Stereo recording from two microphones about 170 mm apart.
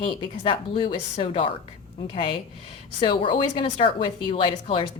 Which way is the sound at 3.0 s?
30° left (ahead or behind).